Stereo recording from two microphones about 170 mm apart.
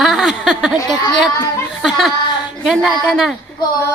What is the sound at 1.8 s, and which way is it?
Speech, centre (ahead or behind).